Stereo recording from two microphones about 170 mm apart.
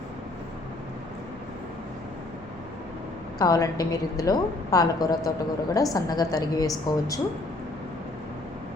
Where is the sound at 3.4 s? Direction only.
20° left (ahead or behind).